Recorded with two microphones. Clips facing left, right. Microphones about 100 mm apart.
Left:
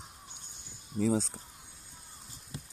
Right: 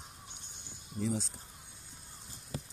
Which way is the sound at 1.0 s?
90° left.